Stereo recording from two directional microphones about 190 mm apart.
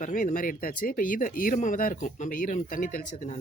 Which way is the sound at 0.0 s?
45° left (ahead or behind).